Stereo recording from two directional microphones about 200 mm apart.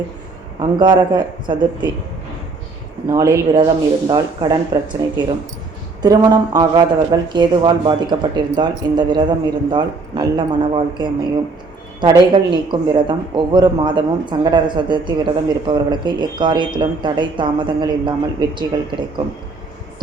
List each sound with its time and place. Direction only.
0.6 s a man's voice: 20° right (ahead or behind)
3.1 s a man's voice: 15° right (ahead or behind)